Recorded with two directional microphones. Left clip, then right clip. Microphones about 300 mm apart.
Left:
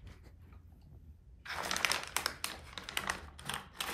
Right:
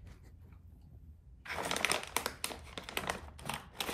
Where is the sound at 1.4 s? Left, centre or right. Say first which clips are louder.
Even; right.